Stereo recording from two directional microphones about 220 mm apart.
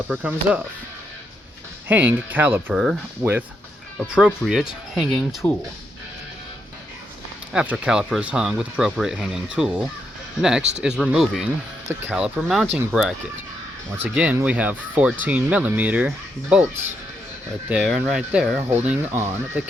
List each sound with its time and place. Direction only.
0.1 s speech: 5° right (ahead or behind)
1.9 s speech: 10° right (ahead or behind)
7.5 s speech: 5° right (ahead or behind)
17.7 s speech: centre (ahead or behind)